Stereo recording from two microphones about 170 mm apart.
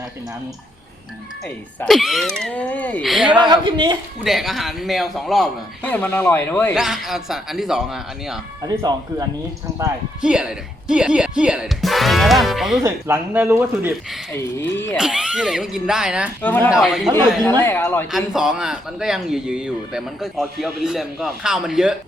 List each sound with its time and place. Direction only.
1.5 s speech: 5° left (ahead or behind)
3.0 s speech: centre (ahead or behind)
3.4 s speech: 25° right (ahead or behind)
4.2 s speech: centre (ahead or behind)
6.7 s speech: centre (ahead or behind)
8.6 s speech: 25° right (ahead or behind)
10.2 s speech: 5° right (ahead or behind)
12.8 s speech: 15° right (ahead or behind)
14.3 s speech: 15° left (ahead or behind)
14.9 s speech: 5° right (ahead or behind)
16.4 s speech: 10° left (ahead or behind)
16.7 s speech: centre (ahead or behind)
17.6 s speech: 15° left (ahead or behind)
18.1 s speech: 5° right (ahead or behind)